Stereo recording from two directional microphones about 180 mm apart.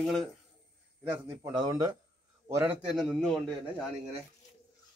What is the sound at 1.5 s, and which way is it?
Speech, 20° right (ahead or behind).